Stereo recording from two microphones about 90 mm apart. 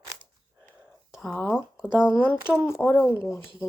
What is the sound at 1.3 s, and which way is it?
Speech, 20° left (ahead or behind).